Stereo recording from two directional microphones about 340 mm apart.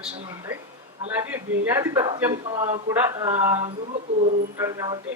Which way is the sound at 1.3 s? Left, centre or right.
Centre.